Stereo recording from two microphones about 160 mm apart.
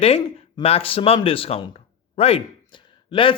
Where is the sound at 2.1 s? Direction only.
35° left (ahead or behind).